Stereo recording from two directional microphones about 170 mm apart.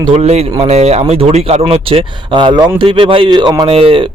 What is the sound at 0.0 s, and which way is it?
A man's voice, 35° right (ahead or behind).